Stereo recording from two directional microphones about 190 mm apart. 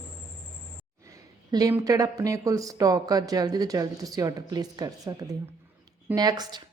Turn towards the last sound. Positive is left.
turn(degrees=-20)  # may be behind; listen again after turning